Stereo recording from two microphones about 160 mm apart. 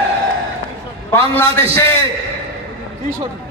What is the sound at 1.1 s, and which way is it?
Speech, 15° left (ahead or behind).